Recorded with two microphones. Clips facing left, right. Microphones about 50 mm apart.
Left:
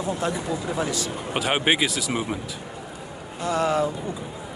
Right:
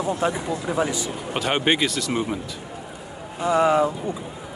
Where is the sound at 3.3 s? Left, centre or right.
Centre.